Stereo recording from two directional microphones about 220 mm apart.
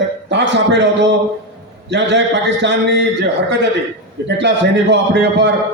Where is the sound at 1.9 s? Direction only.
50° right (ahead or behind).